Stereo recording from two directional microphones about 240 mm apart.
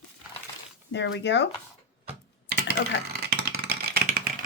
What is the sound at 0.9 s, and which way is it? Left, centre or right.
Speech, left.